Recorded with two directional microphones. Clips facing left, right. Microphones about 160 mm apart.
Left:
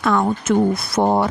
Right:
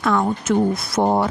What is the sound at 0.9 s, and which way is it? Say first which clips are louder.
Speech: left 1 dB; 65° left (ahead or behind).